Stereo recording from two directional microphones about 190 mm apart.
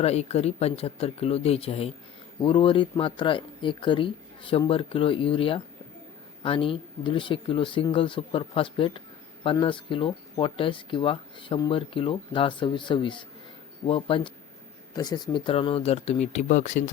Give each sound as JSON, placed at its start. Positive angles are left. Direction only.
{"t": 0.0, "sound": "speech", "side_deg": 35}